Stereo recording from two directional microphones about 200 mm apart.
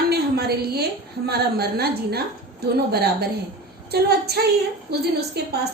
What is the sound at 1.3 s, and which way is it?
A woman's voice, 50° right (ahead or behind).